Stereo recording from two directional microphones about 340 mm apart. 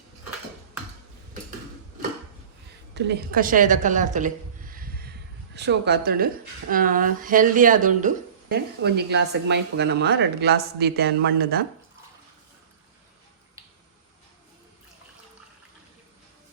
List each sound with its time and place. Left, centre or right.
2.9 s a woman's voice: right